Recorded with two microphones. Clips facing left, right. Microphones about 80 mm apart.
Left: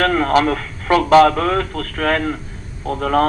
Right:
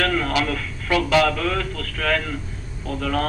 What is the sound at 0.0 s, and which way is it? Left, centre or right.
A man's voice, left.